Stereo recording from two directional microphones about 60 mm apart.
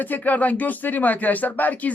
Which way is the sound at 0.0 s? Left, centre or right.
Left.